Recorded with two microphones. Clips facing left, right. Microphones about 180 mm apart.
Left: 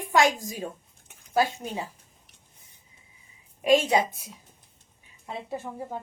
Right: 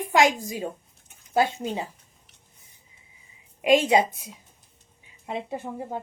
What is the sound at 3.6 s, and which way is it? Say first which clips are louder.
Speech: right 2 dB; 20° right (ahead or behind).